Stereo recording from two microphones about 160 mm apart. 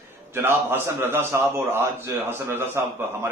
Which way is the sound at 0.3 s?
15° right (ahead or behind).